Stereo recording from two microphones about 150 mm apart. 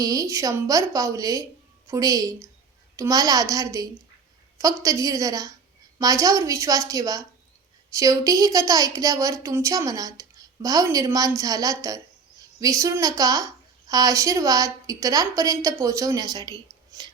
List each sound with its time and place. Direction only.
0.0 s a woman's voice: 25° right (ahead or behind)